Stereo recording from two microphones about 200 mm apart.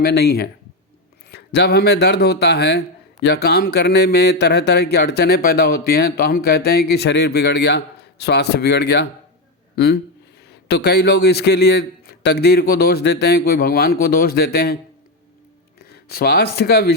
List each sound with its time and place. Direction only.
0.0 s a man's voice: 50° left (ahead or behind)
15.8 s speech: 50° left (ahead or behind)